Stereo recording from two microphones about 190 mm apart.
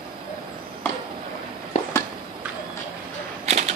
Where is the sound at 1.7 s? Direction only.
40° left (ahead or behind).